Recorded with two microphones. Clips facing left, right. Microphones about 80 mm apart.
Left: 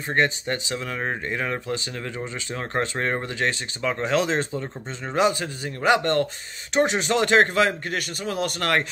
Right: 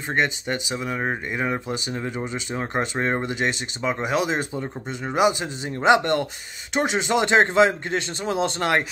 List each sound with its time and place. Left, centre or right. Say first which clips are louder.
0.1 s speech: left 1 dB; centre